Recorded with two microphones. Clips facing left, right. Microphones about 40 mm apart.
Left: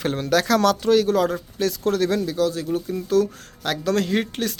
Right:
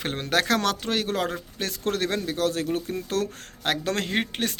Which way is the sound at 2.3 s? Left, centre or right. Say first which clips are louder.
Left 3 dB; right.